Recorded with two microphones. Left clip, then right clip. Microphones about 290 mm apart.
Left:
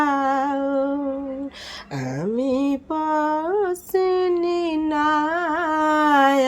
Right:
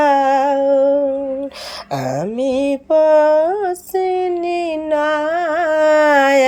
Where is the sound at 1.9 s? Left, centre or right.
Centre.